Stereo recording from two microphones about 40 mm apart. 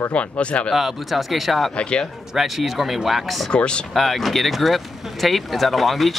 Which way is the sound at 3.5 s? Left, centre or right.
Left.